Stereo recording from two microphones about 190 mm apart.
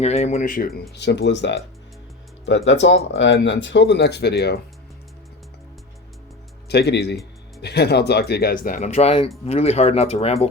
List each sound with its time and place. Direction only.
0.0 s speech: 35° left (ahead or behind)
0.9 s speech: 65° left (ahead or behind)
6.7 s speech: 60° left (ahead or behind); by 10.5 s 35° left (ahead or behind)